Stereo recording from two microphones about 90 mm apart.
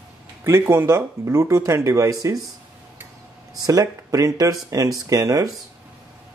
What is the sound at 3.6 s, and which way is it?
Speech, 40° right (ahead or behind).